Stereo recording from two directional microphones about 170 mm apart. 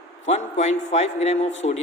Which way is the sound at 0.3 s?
40° left (ahead or behind).